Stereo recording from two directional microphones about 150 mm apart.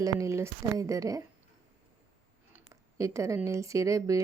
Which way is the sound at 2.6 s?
20° right (ahead or behind).